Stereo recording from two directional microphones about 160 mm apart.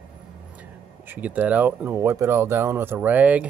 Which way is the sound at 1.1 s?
10° right (ahead or behind).